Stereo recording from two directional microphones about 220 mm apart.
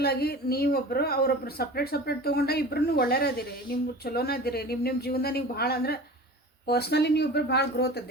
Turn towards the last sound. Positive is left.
turn(degrees=45)  # may be behind; listen again after turning